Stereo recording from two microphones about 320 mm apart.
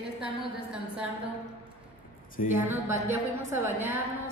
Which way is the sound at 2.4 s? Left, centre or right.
Left.